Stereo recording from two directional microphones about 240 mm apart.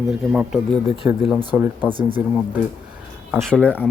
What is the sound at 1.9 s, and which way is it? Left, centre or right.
Speech, right.